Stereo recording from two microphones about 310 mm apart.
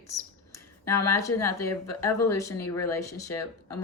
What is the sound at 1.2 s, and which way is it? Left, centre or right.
Speech, centre.